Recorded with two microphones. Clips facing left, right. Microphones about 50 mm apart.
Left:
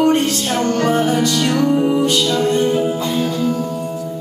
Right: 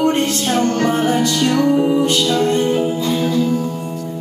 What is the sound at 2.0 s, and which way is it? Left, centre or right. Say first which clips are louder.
Music: even; right.